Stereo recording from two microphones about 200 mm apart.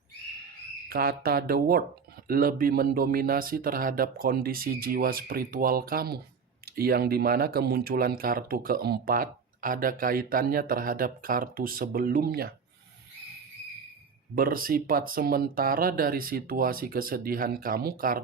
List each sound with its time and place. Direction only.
0.9 s speech: 50° right (ahead or behind)
14.3 s speech: 45° right (ahead or behind)